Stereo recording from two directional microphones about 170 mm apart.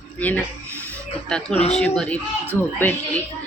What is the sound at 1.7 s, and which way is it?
A woman's voice, 5° left (ahead or behind).